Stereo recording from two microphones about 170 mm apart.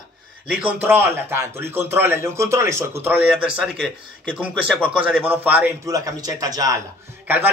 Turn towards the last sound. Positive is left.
turn(degrees=-10)  # may be behind; listen again after turning